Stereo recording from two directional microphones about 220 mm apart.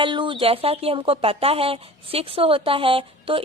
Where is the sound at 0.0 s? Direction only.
20° right (ahead or behind).